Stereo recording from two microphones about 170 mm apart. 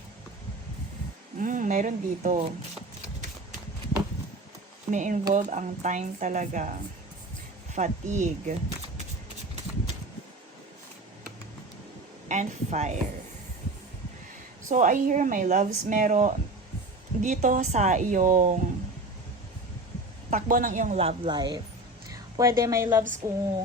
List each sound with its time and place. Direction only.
1.4 s a woman's voice: 50° right (ahead or behind)
4.9 s a woman's voice: 45° right (ahead or behind)
7.7 s a woman's voice: 45° right (ahead or behind)
12.3 s a woman's voice: 45° right (ahead or behind)
14.7 s a woman's voice: 50° right (ahead or behind)
20.3 s a woman's voice: 50° right (ahead or behind)
21.2 s a woman's voice: 25° right (ahead or behind)